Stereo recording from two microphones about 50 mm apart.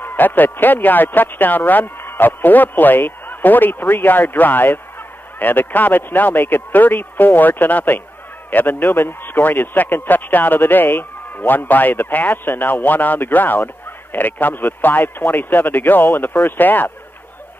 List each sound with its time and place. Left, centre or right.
0.0 s a man's voice: left